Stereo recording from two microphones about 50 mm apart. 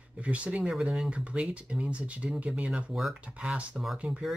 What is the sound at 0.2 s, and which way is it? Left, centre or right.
Speech, right.